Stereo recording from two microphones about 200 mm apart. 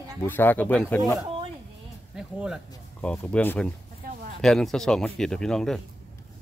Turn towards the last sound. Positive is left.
turn(degrees=0)  # may be behind; listen again after turning